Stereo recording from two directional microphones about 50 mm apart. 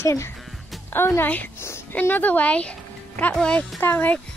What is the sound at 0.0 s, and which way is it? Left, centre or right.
Speech, left.